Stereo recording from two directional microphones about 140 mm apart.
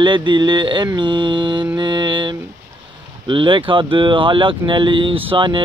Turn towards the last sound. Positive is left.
turn(degrees=-35)  # may be behind; listen again after turning